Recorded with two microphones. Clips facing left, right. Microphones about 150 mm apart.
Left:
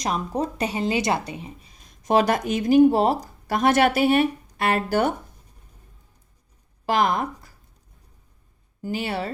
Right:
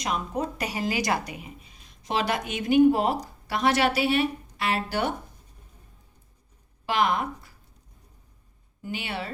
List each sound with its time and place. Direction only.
0.0 s speech: 35° left (ahead or behind)
6.8 s speech: 40° left (ahead or behind)
8.8 s speech: 40° left (ahead or behind)